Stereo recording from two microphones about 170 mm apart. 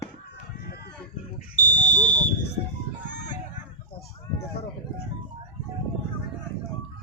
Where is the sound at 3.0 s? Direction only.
90° left.